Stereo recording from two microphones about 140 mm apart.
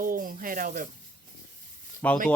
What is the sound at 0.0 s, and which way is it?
Speech, 80° right.